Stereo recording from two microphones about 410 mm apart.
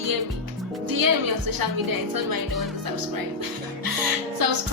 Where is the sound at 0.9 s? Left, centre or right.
Right.